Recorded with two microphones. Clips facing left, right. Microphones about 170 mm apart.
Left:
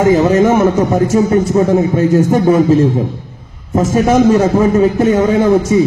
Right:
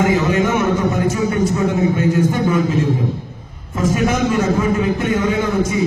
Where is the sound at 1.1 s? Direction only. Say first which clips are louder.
Left 7 dB; 40° left (ahead or behind).